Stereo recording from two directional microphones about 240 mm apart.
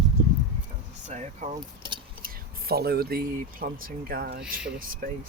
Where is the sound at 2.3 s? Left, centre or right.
Right.